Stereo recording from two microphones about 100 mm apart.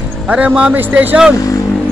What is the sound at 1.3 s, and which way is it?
Speech, 35° left (ahead or behind).